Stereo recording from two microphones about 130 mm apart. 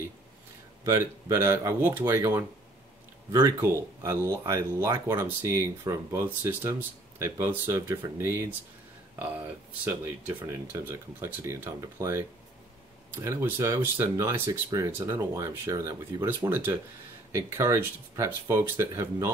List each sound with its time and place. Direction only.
0.8 s speech: 20° right (ahead or behind)
9.8 s speech: 20° right (ahead or behind)
17.6 s speech: 20° right (ahead or behind)